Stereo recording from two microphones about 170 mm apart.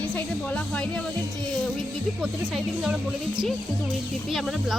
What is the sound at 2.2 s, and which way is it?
Speech, centre (ahead or behind).